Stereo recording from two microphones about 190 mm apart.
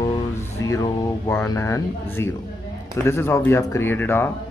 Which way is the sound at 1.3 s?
15° left (ahead or behind).